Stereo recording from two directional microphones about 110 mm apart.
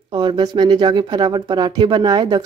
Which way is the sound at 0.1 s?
45° right (ahead or behind).